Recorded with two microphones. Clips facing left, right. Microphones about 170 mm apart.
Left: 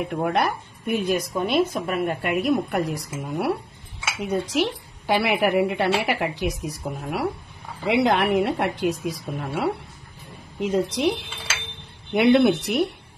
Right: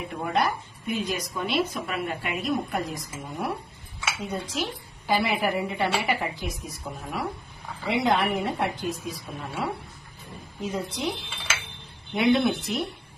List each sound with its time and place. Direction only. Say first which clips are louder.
0.0 s a woman's voice: left 4 dB; 65° left (ahead or behind)